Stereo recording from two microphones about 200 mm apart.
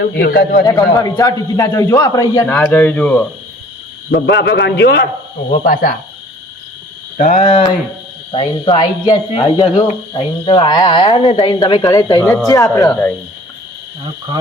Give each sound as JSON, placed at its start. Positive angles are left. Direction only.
{"t": 0.2, "sound": "a man's voice", "side_deg": 50}
{"t": 0.6, "sound": "a man's voice", "side_deg": 20}
{"t": 4.1, "sound": "a man's voice", "side_deg": 60}
{"t": 5.6, "sound": "a man's voice", "side_deg": 45}
{"t": 7.2, "sound": "a man's voice", "side_deg": 40}